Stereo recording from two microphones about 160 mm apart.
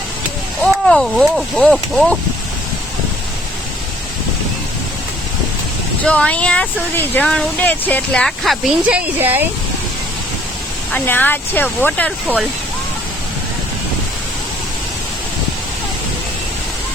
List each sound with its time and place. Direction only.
0.6 s speech: centre (ahead or behind)
6.1 s speech: 10° left (ahead or behind)
8.9 s speech: 10° right (ahead or behind)
10.9 s speech: 10° left (ahead or behind)